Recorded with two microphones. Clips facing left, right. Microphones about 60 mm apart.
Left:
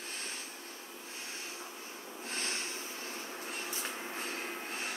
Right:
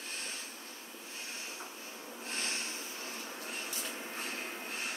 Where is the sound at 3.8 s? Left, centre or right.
Left.